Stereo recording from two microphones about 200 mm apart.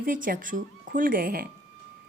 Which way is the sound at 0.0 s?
45° right (ahead or behind).